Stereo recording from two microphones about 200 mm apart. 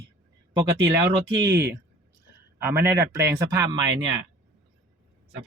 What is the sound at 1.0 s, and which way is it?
Speech, 15° right (ahead or behind).